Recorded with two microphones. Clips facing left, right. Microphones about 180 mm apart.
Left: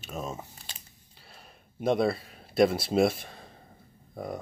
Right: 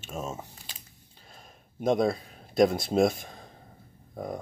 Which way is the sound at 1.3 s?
5° left (ahead or behind).